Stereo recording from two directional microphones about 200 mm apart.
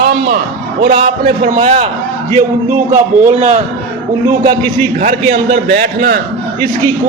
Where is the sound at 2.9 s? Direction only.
35° right (ahead or behind).